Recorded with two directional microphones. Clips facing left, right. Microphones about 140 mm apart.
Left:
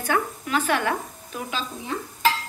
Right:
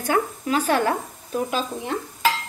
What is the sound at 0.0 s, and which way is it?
Speech, 40° right (ahead or behind).